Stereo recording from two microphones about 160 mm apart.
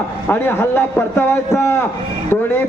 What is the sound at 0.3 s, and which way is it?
A man's voice, 15° left (ahead or behind).